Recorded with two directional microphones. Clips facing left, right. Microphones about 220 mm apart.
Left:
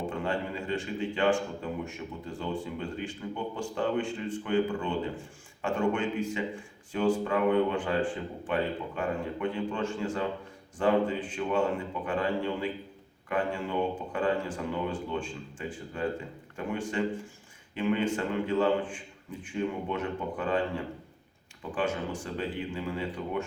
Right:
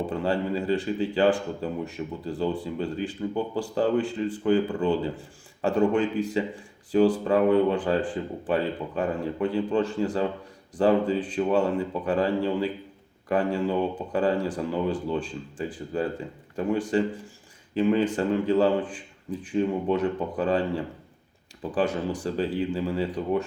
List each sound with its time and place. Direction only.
0.1 s speech: 35° right (ahead or behind)